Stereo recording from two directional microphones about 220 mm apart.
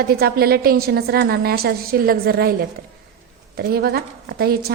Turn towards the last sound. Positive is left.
turn(degrees=-45)  # may be behind; listen again after turning